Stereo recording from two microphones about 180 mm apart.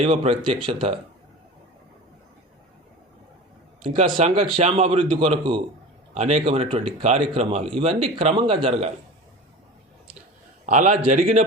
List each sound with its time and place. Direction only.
0.0 s speech: 30° right (ahead or behind)
4.2 s speech: 30° right (ahead or behind)
10.7 s a man's voice: 45° right (ahead or behind)